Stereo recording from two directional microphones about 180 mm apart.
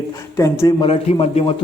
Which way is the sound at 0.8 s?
35° left (ahead or behind).